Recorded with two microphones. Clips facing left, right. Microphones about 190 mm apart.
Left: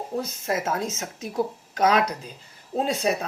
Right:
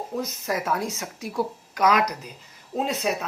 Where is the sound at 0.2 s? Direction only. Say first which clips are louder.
Left 1 dB; 25° left (ahead or behind).